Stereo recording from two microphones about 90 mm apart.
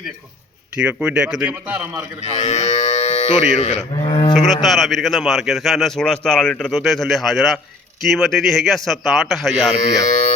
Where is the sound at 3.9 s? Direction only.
75° left (ahead or behind).